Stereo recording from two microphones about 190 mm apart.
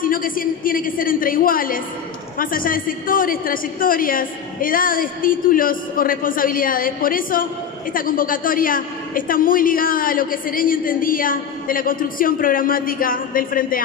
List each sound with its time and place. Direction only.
0.0 s a woman's voice: 50° left (ahead or behind)